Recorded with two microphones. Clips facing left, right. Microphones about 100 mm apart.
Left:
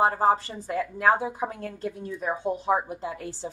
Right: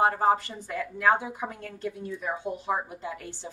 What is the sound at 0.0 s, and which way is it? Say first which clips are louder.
A woman's voice: left 1 dB; 30° left (ahead or behind).